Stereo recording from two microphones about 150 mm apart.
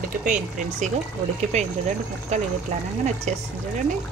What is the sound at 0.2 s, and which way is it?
Speech, 60° right (ahead or behind).